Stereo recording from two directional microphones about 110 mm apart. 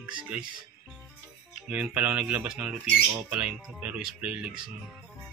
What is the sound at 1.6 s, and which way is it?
Speech, 10° right (ahead or behind).